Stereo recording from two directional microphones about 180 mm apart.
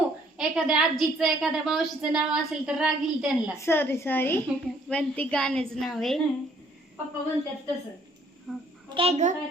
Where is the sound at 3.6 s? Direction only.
10° left (ahead or behind).